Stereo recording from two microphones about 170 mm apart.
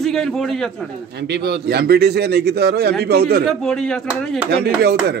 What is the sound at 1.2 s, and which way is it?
A man's voice, 75° right (ahead or behind).